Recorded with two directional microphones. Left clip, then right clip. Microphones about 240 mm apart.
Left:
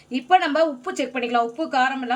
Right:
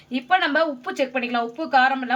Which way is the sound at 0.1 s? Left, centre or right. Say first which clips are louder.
Left 1 dB; right.